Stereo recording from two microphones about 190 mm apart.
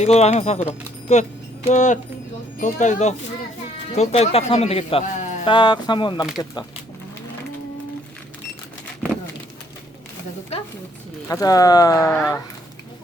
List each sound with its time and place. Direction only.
0.0 s speech: 35° left (ahead or behind)
11.3 s speech: 15° left (ahead or behind)